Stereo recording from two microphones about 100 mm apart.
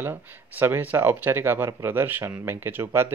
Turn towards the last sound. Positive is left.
turn(degrees=-20)  # may be behind; listen again after turning